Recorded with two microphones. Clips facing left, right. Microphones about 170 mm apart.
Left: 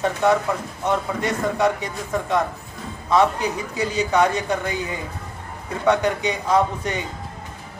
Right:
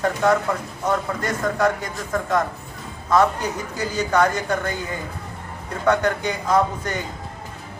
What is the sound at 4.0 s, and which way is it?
Speech, 10° left (ahead or behind).